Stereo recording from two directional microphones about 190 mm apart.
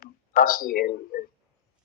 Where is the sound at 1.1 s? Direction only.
50° left (ahead or behind).